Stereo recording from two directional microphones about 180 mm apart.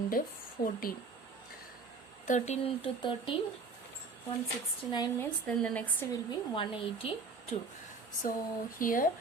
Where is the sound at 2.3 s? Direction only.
35° left (ahead or behind).